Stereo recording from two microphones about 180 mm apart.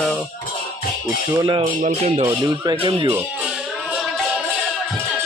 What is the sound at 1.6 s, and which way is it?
Speech, 40° right (ahead or behind).